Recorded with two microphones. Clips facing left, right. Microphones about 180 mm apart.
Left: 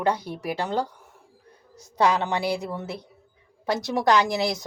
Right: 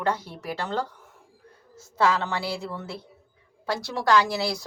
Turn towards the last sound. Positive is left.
turn(degrees=20)  # may be behind; listen again after turning